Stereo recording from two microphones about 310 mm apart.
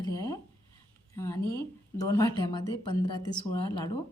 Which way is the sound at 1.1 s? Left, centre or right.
Centre.